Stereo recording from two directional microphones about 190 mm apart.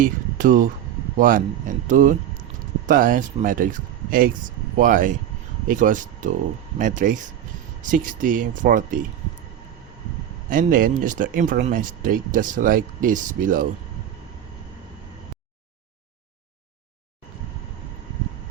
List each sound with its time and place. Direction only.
0.0 s speech: 45° right (ahead or behind)
10.5 s speech: 45° right (ahead or behind)